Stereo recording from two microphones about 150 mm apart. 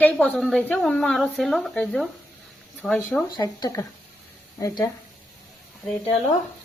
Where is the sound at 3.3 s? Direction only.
25° left (ahead or behind).